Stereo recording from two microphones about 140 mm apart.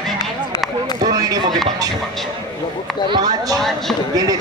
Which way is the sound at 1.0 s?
25° right (ahead or behind).